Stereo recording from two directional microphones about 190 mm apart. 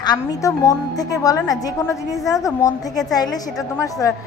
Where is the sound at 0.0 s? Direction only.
20° left (ahead or behind).